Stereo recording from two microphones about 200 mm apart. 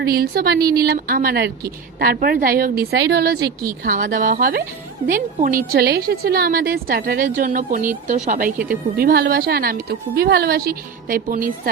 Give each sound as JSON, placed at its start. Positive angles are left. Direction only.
{"t": 0.0, "sound": "speech", "side_deg": -50}